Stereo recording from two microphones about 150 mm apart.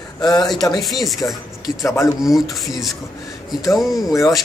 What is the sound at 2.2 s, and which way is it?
Speech, centre (ahead or behind).